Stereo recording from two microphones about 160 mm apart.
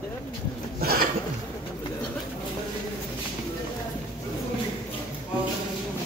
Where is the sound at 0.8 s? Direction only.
70° right (ahead or behind).